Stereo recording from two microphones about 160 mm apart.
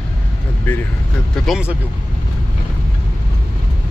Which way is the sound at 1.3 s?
5° right (ahead or behind).